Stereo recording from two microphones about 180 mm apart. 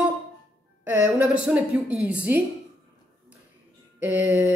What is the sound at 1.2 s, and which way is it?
A woman's voice, 5° right (ahead or behind).